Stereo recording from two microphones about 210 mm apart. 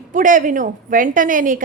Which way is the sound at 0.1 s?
40° right (ahead or behind).